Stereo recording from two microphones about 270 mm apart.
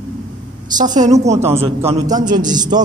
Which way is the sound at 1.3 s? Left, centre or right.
Centre.